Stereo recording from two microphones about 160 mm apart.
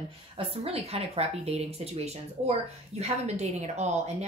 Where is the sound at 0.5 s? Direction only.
40° right (ahead or behind).